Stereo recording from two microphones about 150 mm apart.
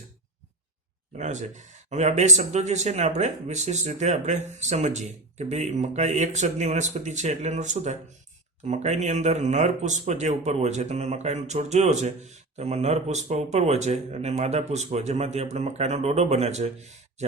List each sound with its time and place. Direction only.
1.2 s speech: 50° right (ahead or behind)